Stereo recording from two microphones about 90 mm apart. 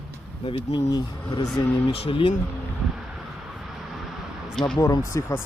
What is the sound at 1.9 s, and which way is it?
Speech, 90° left.